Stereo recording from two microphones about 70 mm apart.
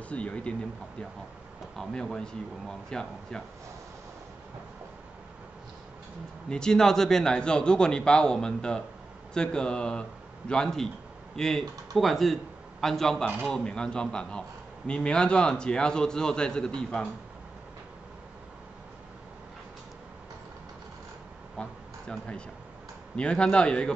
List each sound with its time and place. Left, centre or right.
0.1 s a man's voice: centre
1.8 s a man's voice: centre
6.5 s a man's voice: centre
21.6 s a man's voice: centre
23.1 s a man's voice: centre